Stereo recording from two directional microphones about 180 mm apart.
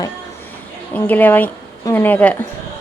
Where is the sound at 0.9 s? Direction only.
10° left (ahead or behind).